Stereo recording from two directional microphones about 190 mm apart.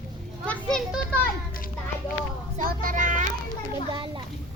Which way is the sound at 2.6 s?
45° right (ahead or behind).